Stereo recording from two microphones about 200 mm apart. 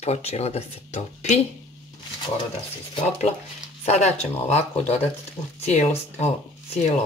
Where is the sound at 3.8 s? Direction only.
35° left (ahead or behind).